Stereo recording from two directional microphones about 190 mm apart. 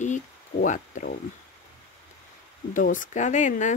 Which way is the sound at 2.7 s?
45° left (ahead or behind).